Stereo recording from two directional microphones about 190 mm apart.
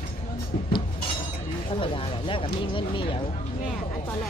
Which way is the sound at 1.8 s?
25° left (ahead or behind).